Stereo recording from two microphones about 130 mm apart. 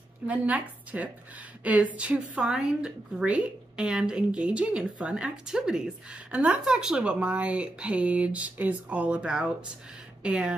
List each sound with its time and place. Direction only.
0.3 s a woman's voice: 10° right (ahead or behind)